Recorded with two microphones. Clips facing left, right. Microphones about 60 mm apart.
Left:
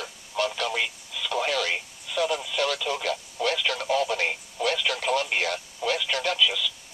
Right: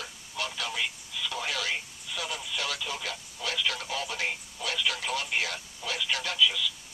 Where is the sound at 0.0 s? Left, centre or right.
Left.